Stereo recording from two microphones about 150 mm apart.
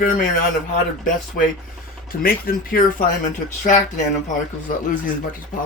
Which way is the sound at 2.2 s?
80° left.